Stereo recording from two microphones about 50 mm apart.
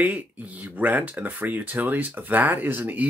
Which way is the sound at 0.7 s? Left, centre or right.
Right.